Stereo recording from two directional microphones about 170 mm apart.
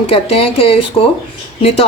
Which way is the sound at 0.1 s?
35° left (ahead or behind).